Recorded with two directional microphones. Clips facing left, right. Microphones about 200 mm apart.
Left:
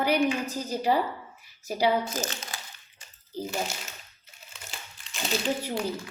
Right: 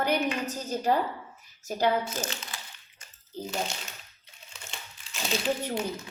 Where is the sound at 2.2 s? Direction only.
35° left (ahead or behind).